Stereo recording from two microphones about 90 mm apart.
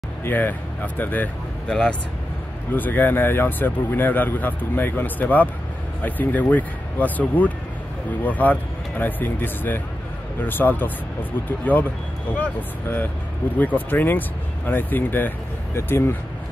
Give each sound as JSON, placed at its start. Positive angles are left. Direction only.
{"t": 0.2, "sound": "speech", "side_deg": 20}
{"t": 1.7, "sound": "speech", "side_deg": 10}
{"t": 2.7, "sound": "speech", "side_deg": 20}